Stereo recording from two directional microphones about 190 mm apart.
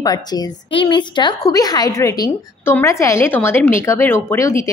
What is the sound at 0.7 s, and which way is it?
Speech, 25° left (ahead or behind).